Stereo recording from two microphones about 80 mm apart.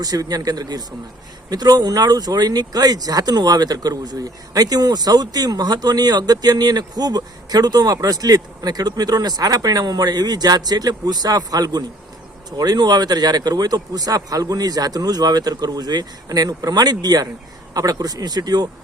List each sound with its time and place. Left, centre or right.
0.0 s a man's voice: right